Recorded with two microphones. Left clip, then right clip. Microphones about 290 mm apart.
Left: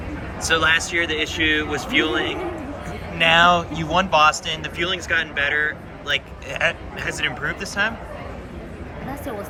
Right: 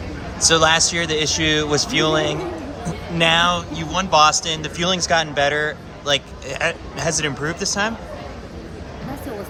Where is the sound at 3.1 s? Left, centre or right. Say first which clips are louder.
Left 2 dB; centre.